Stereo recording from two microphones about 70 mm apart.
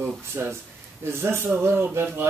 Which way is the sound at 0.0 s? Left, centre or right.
Right.